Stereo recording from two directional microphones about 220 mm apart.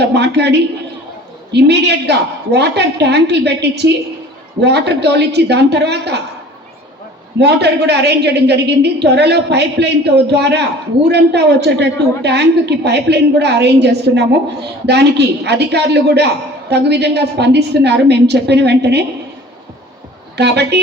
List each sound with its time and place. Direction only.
0.1 s a woman's voice: 50° right (ahead or behind)
1.5 s a woman's voice: 50° right (ahead or behind)
7.3 s a woman's voice: 50° right (ahead or behind)
20.3 s a woman's voice: 50° right (ahead or behind)